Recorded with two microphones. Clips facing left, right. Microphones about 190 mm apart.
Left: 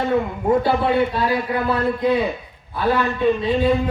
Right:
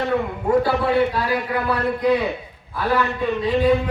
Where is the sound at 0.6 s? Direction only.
25° left (ahead or behind).